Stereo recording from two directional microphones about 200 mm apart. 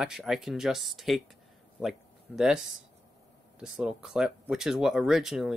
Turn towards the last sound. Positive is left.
turn(degrees=0)  # may be behind; listen again after turning